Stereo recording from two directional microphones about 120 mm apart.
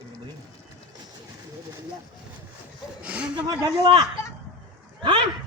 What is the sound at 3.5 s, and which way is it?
Speech, 35° right (ahead or behind).